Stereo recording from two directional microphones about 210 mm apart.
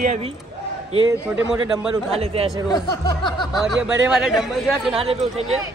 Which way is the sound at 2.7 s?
20° left (ahead or behind).